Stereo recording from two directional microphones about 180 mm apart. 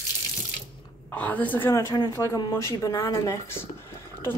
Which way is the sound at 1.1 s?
10° left (ahead or behind).